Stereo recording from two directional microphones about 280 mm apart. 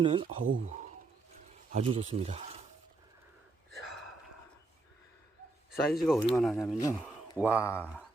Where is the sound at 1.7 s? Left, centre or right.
Right.